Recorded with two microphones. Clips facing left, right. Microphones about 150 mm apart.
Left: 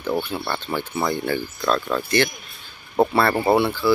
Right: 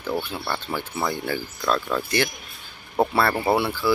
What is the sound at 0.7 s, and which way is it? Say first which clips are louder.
Speech: left 5 dB; 5° right (ahead or behind).